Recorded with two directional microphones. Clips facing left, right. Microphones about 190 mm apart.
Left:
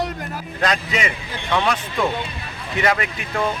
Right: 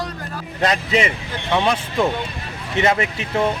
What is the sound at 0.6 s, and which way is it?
Speech, 25° right (ahead or behind).